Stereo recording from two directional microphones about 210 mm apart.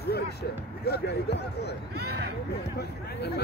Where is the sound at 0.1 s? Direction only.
50° left (ahead or behind).